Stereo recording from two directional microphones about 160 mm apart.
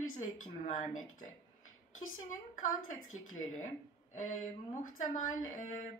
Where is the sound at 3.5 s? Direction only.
50° left (ahead or behind).